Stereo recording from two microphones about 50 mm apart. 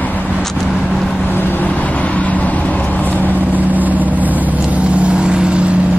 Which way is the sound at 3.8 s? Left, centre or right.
Right.